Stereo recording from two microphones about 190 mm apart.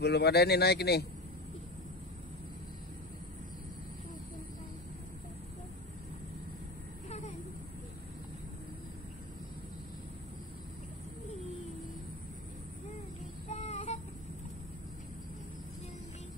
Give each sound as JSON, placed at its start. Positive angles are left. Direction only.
{"t": 0.0, "sound": "speech", "side_deg": 60}
{"t": 7.1, "sound": "a sound", "side_deg": 35}
{"t": 13.5, "sound": "child singing", "side_deg": 35}